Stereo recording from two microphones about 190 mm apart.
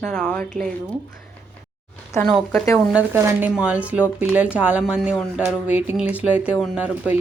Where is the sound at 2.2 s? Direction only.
5° left (ahead or behind).